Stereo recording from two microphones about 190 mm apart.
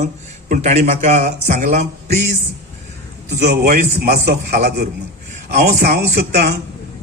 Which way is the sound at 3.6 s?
50° right (ahead or behind).